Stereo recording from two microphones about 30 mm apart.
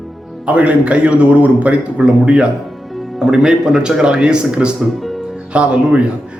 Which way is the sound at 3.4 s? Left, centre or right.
Right.